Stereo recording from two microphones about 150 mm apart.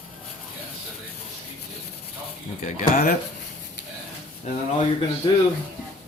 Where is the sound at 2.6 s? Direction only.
65° left (ahead or behind).